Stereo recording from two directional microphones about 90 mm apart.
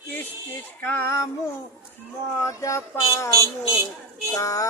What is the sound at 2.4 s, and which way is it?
Music, 35° left (ahead or behind).